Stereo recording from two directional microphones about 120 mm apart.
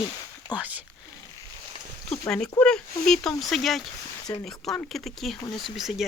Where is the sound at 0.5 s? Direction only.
10° right (ahead or behind).